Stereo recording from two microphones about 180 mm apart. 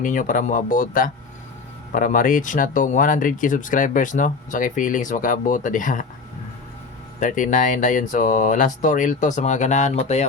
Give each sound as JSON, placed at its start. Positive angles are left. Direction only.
{"t": 0.0, "sound": "speech", "side_deg": 45}
{"t": 7.2, "sound": "speech", "side_deg": 45}